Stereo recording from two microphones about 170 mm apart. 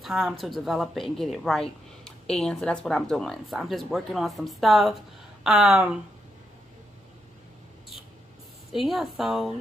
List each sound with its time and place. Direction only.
0.0 s a woman's voice: centre (ahead or behind)
8.7 s a woman's voice: centre (ahead or behind)